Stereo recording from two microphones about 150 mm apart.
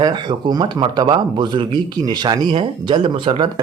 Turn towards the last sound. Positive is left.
turn(degrees=-35)  # may be behind; listen again after turning